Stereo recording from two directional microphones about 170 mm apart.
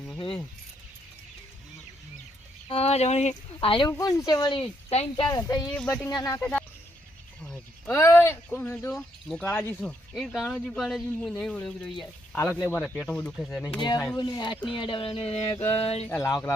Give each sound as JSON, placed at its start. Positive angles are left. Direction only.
{"t": 2.6, "sound": "speech", "side_deg": 35}
{"t": 5.5, "sound": "speech", "side_deg": 20}
{"t": 5.7, "sound": "speech", "side_deg": 5}
{"t": 6.1, "sound": "speech", "side_deg": 20}
{"t": 6.4, "sound": "speech", "side_deg": 10}
{"t": 7.4, "sound": "a sound", "side_deg": 5}
{"t": 7.9, "sound": "speech", "side_deg": 15}
{"t": 8.9, "sound": "speech", "side_deg": 5}
{"t": 12.4, "sound": "speech", "side_deg": 15}
{"t": 13.7, "sound": "speech", "side_deg": 25}
{"t": 16.0, "sound": "speech", "side_deg": 15}